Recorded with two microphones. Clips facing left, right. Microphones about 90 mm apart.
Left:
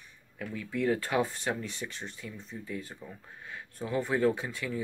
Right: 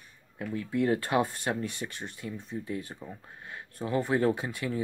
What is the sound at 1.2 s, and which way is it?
Speech, 55° right (ahead or behind).